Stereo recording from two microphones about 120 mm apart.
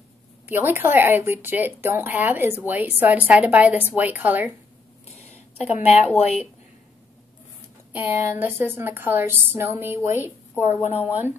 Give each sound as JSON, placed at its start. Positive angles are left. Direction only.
{"t": 0.5, "sound": "a woman's voice", "side_deg": -15}
{"t": 5.6, "sound": "speech", "side_deg": 65}
{"t": 7.9, "sound": "a woman's voice", "side_deg": -15}